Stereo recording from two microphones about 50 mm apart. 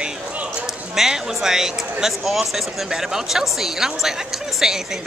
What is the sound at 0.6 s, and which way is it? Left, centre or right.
Speech, centre.